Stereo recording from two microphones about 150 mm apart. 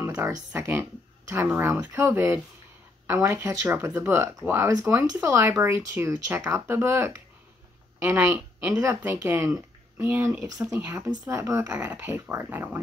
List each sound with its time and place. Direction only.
0.0 s speech: 15° right (ahead or behind)
8.6 s speech: 20° right (ahead or behind)